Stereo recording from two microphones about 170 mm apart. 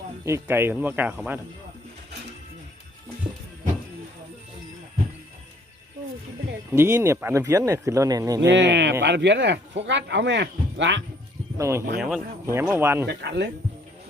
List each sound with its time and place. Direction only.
0.3 s speech: 15° right (ahead or behind)
6.7 s speech: 15° right (ahead or behind)
8.4 s speech: 90° right
11.5 s speech: 15° right (ahead or behind)
11.9 s speech: centre (ahead or behind)
12.5 s speech: 15° right (ahead or behind)
13.1 s speech: 85° right